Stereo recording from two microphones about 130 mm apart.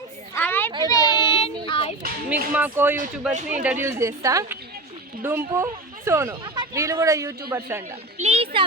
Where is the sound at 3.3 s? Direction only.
65° right (ahead or behind).